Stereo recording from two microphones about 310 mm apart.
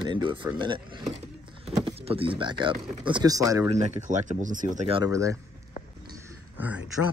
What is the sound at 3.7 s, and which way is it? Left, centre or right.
Speech, right.